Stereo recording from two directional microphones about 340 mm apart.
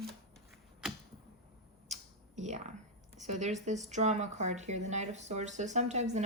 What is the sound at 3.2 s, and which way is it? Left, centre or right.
Speech, right.